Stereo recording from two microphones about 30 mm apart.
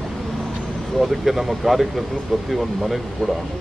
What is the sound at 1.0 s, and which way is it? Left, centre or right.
Speech, centre.